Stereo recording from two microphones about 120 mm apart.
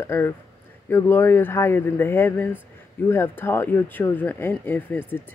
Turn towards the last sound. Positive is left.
turn(degrees=15)  # may be behind; listen again after turning